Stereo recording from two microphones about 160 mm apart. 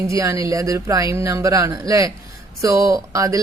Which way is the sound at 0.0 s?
20° right (ahead or behind).